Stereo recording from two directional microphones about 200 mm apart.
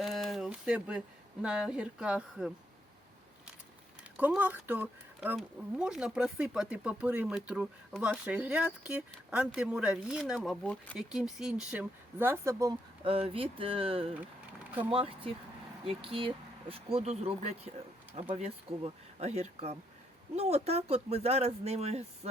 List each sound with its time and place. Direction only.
0.0 s speech: centre (ahead or behind)
4.2 s speech: 10° right (ahead or behind)
13.1 s speech: 25° right (ahead or behind)